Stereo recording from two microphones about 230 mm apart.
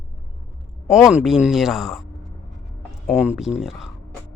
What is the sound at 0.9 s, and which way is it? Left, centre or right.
Speech, centre.